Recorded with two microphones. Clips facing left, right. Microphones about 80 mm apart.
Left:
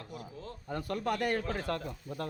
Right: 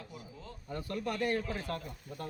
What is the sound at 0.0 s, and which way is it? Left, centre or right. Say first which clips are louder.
Speech: left 4 dB; left.